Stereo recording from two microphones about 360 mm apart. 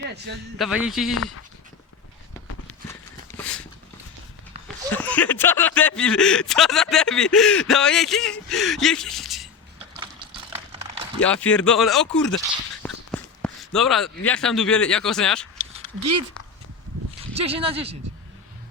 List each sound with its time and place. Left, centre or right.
0.6 s speech: centre
1.1 s speech: left
3.3 s a sound: centre
4.9 s speech: centre
10.0 s a sound: centre
11.2 s speech: centre
12.8 s a sound: centre
14.3 s speech: centre
17.3 s speech: centre